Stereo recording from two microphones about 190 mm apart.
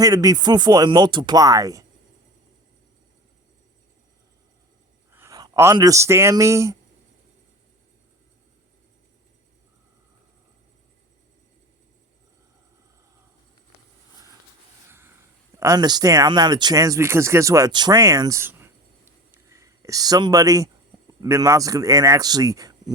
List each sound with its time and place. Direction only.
0.0 s speech: 20° right (ahead or behind)
5.1 s speech: 15° right (ahead or behind)
14.8 s a sound: 10° right (ahead or behind)
15.5 s speech: 15° right (ahead or behind)
19.3 s a sound: 15° right (ahead or behind)
21.1 s speech: 20° right (ahead or behind)